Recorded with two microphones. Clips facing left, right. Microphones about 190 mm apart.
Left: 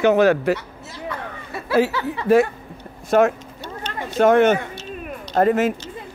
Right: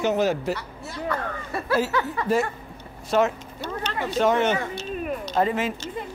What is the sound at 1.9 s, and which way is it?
Speech, 30° left (ahead or behind).